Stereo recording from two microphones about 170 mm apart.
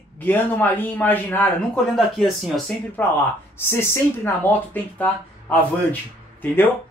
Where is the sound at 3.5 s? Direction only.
15° left (ahead or behind).